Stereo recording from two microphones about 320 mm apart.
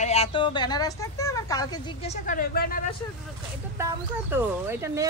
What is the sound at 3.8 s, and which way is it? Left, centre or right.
Speech, centre.